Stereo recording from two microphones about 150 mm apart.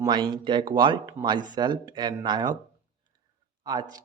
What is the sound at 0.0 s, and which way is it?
Speech, 30° right (ahead or behind).